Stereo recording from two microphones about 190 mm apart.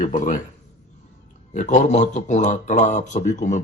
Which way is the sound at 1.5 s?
40° left (ahead or behind).